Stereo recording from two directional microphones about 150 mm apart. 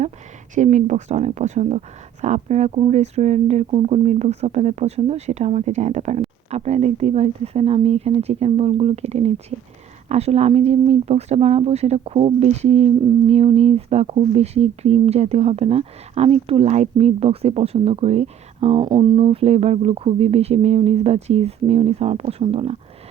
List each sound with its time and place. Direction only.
0.5 s speech: 55° right (ahead or behind)